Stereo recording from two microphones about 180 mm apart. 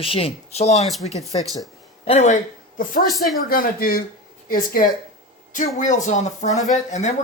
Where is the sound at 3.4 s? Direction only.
55° left (ahead or behind).